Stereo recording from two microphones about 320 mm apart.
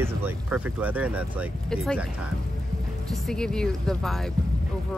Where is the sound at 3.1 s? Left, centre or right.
Centre.